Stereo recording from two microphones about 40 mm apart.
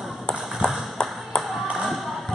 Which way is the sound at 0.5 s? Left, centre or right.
Centre.